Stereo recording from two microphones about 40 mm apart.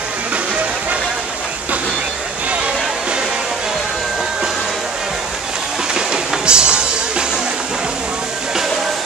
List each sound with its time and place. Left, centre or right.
5.9 s music: right